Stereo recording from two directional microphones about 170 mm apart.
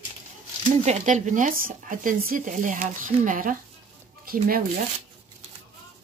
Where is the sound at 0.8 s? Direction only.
45° right (ahead or behind).